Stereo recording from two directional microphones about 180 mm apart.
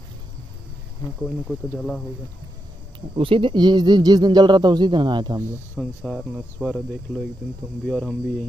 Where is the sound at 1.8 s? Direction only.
5° left (ahead or behind).